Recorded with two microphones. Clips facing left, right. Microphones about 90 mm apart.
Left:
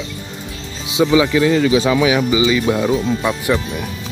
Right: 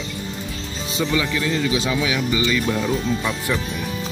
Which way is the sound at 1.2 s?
60° left (ahead or behind).